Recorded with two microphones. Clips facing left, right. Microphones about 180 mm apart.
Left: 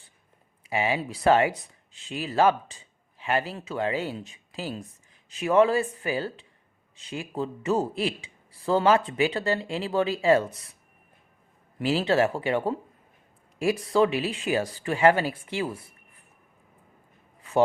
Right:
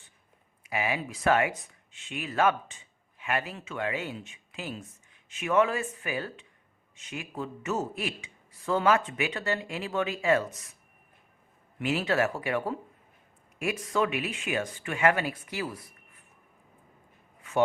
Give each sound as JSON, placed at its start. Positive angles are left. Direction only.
{"t": 0.6, "sound": "a man's voice", "side_deg": 30}
{"t": 11.8, "sound": "a man's voice", "side_deg": 30}
{"t": 17.5, "sound": "a sound", "side_deg": 35}